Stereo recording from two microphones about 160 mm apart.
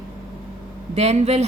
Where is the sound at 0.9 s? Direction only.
40° right (ahead or behind).